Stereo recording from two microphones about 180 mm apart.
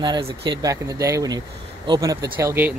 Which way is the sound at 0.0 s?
25° right (ahead or behind).